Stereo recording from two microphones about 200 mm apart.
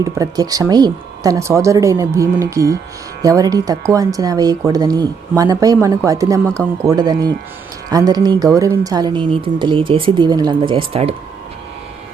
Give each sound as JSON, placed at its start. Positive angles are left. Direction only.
{"t": 0.0, "sound": "a woman's voice", "side_deg": -15}